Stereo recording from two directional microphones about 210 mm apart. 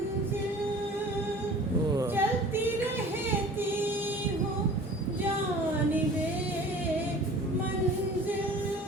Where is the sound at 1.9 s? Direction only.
10° right (ahead or behind).